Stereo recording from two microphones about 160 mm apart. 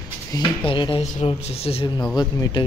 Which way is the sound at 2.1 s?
25° left (ahead or behind).